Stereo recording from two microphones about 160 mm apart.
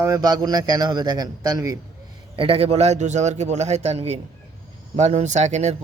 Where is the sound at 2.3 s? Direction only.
35° right (ahead or behind).